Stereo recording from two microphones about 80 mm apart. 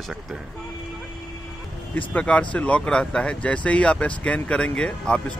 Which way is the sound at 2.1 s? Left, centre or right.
Centre.